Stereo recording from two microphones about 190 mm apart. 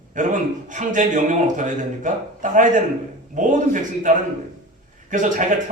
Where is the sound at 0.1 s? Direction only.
40° right (ahead or behind).